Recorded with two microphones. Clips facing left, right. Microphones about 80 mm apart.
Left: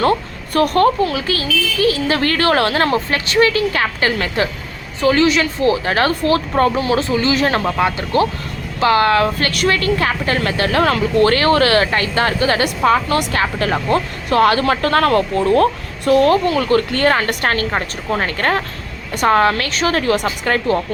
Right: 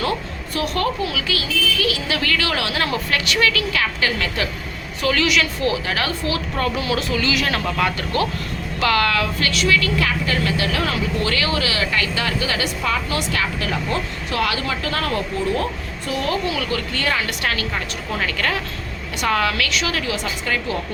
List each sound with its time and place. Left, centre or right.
0.0 s a woman's voice: left